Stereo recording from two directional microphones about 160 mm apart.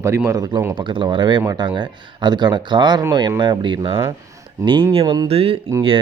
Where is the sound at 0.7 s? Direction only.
30° right (ahead or behind).